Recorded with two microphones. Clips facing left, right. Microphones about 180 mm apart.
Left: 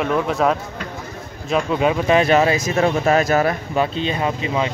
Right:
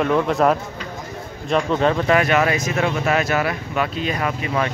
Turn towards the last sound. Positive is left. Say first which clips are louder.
# left 1 dB
turn(degrees=20)  # may be behind; listen again after turning